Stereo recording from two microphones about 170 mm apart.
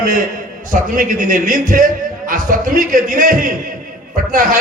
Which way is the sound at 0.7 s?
50° right (ahead or behind).